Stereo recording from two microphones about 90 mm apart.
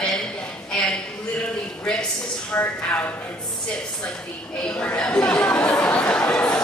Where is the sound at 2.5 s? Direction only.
20° left (ahead or behind).